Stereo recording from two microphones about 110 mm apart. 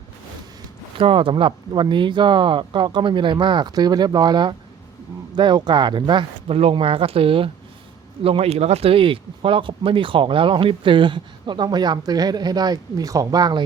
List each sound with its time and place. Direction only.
0.9 s speech: 55° right (ahead or behind)
6.5 s speech: 60° right (ahead or behind); by 13.7 s 40° right (ahead or behind)